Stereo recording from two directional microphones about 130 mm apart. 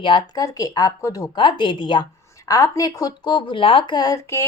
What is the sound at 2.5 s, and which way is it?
Speech, 25° left (ahead or behind).